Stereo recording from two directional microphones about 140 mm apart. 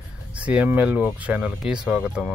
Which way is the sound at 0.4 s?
10° right (ahead or behind).